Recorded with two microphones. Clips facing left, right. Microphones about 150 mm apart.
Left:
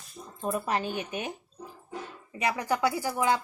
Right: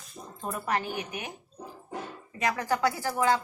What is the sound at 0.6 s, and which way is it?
Speech, 20° left (ahead or behind).